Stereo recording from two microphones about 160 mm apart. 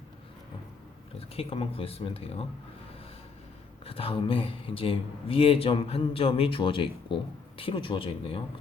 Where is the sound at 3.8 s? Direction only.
35° left (ahead or behind).